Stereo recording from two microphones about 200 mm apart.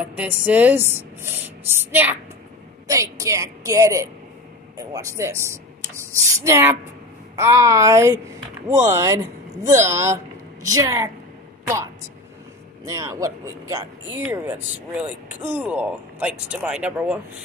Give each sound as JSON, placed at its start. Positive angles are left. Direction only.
{"t": 0.0, "sound": "speech", "side_deg": -5}
{"t": 12.8, "sound": "speech", "side_deg": -15}